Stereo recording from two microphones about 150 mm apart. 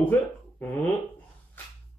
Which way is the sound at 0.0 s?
10° left (ahead or behind).